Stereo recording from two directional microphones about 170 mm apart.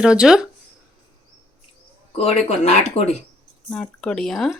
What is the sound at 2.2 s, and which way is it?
Speech, 40° left (ahead or behind).